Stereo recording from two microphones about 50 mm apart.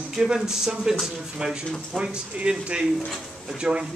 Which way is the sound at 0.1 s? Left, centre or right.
Centre.